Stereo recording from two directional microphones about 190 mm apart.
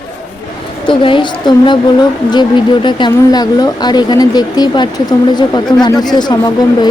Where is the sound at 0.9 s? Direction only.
25° left (ahead or behind).